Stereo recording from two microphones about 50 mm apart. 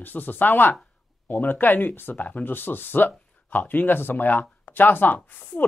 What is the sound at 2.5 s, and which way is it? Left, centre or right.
Speech, left.